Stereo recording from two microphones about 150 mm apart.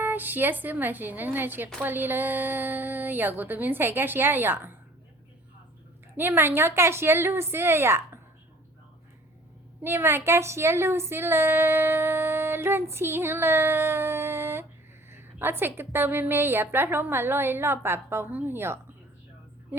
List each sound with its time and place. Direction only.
0.0 s a woman's voice: 10° right (ahead or behind)
6.1 s a woman's voice: 15° right (ahead or behind)
9.8 s a woman's voice: 15° right (ahead or behind)